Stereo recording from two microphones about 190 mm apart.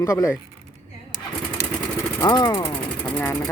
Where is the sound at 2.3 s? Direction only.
25° left (ahead or behind).